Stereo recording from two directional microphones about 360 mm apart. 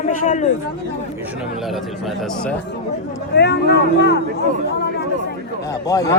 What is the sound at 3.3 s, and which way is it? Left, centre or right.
Speech, left.